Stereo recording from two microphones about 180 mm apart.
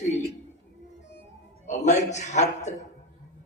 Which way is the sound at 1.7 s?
40° left (ahead or behind).